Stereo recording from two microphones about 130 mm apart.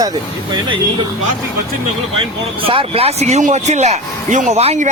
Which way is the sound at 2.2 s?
40° right (ahead or behind).